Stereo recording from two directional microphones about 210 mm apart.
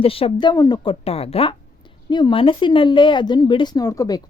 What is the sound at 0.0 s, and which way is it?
Speech, 25° left (ahead or behind).